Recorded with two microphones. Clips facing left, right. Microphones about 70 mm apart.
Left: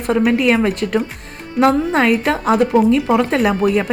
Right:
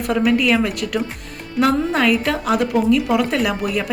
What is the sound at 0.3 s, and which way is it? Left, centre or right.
Speech, left.